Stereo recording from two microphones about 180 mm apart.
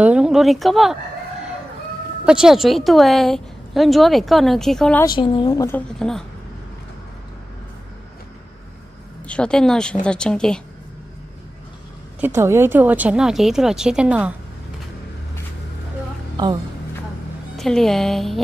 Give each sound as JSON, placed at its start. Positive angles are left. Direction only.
{"t": 0.0, "sound": "speech", "side_deg": -5}
{"t": 2.2, "sound": "a woman's voice", "side_deg": -5}
{"t": 5.0, "sound": "a woman's voice", "side_deg": 25}
{"t": 5.8, "sound": "a woman's voice", "side_deg": 5}
{"t": 9.3, "sound": "a woman's voice", "side_deg": 5}
{"t": 12.4, "sound": "a woman's voice", "side_deg": -15}
{"t": 16.4, "sound": "speech", "side_deg": -20}
{"t": 17.6, "sound": "a woman's voice", "side_deg": 0}